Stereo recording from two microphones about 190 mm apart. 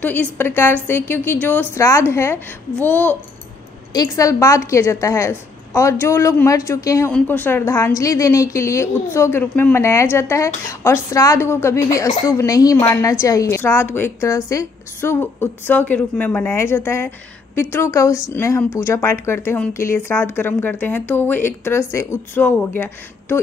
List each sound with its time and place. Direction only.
0.0 s a woman's voice: 10° left (ahead or behind)